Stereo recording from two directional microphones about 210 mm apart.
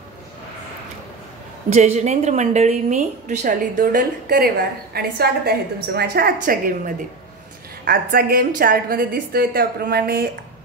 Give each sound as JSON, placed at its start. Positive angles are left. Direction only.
{"t": 1.7, "sound": "a woman's voice", "side_deg": -30}